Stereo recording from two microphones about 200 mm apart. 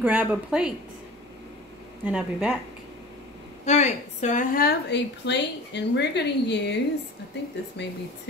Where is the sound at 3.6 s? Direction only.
35° left (ahead or behind); by 7.9 s 60° left (ahead or behind).